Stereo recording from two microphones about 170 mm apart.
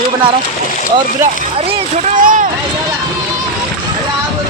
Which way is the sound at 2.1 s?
50° right (ahead or behind).